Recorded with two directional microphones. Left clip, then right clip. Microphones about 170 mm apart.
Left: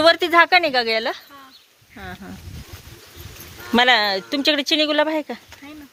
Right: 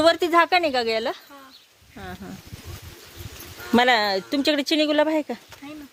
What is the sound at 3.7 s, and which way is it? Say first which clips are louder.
Speech: left 3 dB; 20° right (ahead or behind).